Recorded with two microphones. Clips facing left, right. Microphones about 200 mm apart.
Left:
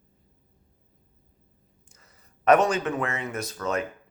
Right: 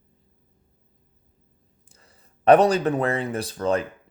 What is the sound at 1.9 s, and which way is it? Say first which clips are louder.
Speech: right 3 dB; 30° right (ahead or behind).